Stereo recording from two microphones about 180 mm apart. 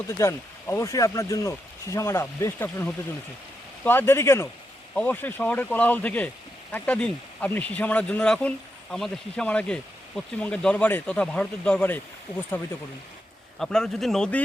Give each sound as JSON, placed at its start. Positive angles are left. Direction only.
{"t": 0.2, "sound": "speech", "side_deg": 15}
{"t": 13.6, "sound": "a man's voice", "side_deg": 5}